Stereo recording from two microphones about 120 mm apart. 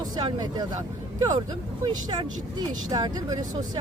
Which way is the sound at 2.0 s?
35° right (ahead or behind).